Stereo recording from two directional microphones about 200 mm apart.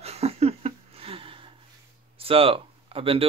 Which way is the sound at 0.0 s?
30° right (ahead or behind).